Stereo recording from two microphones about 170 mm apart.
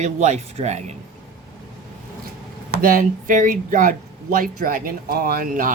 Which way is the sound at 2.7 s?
55° right (ahead or behind).